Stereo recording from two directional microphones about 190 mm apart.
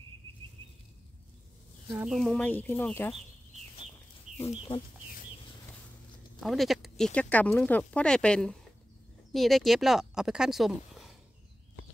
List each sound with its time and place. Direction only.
1.9 s speech: 10° right (ahead or behind)
2.1 s speech: 5° left (ahead or behind)
4.4 s speech: 25° left (ahead or behind)
6.4 s speech: centre (ahead or behind)